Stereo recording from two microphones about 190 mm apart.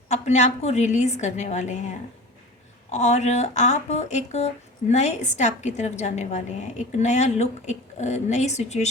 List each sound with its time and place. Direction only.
0.1 s speech: 40° left (ahead or behind)